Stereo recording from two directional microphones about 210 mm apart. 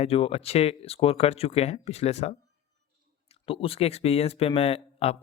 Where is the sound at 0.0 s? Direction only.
30° left (ahead or behind).